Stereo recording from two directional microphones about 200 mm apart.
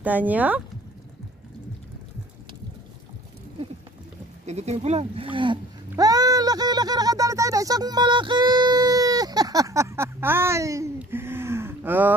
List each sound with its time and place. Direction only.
0.0 s speech: 10° right (ahead or behind)
4.5 s speech: 35° right (ahead or behind); by 12.1 s 10° right (ahead or behind)